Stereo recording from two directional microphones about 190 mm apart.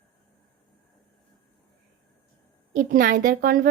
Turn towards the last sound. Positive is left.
turn(degrees=-45)  # may be behind; listen again after turning